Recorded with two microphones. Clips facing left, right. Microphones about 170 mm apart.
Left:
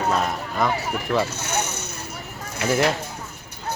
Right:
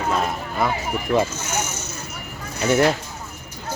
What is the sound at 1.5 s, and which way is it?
Vehicle, 60° left (ahead or behind).